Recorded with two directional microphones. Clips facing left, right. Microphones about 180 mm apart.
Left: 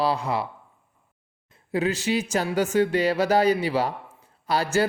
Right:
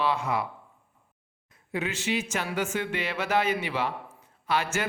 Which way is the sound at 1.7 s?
35° left (ahead or behind).